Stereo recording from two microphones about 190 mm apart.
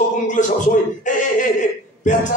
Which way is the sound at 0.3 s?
40° left (ahead or behind).